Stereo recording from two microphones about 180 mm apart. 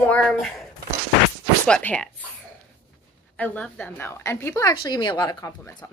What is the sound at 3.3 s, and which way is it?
A woman's voice, 10° left (ahead or behind).